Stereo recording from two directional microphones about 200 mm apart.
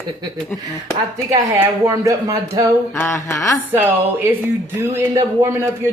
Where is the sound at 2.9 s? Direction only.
15° left (ahead or behind).